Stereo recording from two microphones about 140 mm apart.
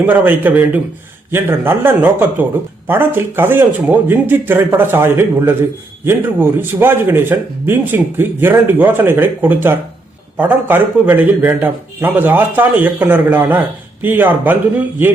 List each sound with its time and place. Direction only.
0.0 s speech: 10° right (ahead or behind)